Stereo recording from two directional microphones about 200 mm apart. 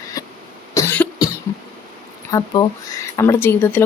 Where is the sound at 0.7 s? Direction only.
10° left (ahead or behind).